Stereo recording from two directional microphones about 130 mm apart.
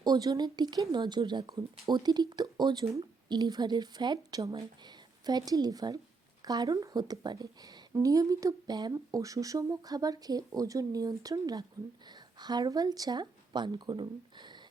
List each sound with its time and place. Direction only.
0.0 s speech: 30° right (ahead or behind)